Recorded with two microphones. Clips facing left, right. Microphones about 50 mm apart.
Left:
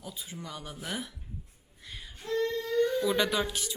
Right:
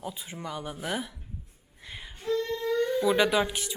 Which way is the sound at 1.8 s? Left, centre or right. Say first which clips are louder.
Right 3 dB; right.